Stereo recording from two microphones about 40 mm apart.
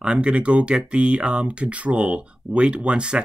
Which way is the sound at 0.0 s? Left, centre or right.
Right.